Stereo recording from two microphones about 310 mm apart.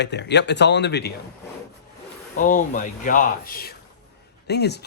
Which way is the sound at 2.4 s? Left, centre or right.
Left.